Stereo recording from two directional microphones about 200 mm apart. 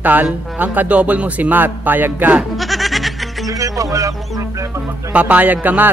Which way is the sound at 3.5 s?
15° right (ahead or behind).